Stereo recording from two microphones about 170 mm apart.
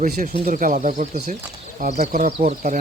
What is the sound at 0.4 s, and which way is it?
Speech, 50° right (ahead or behind).